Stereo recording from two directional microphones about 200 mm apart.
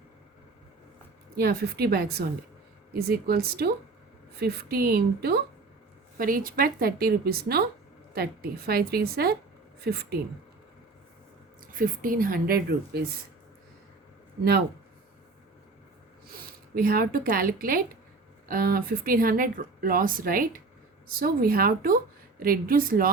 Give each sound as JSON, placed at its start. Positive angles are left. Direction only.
{"t": 1.4, "sound": "speech", "side_deg": -50}
{"t": 11.7, "sound": "speech", "side_deg": -45}
{"t": 16.2, "sound": "speech", "side_deg": -45}